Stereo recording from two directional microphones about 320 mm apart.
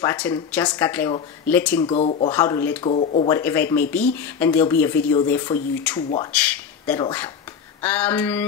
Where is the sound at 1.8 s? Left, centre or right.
Centre.